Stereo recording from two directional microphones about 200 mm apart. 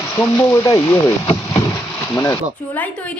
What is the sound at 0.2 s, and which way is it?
A woman's voice, 15° left (ahead or behind).